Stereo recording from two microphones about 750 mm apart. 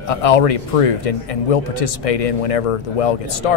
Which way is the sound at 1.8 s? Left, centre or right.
Left.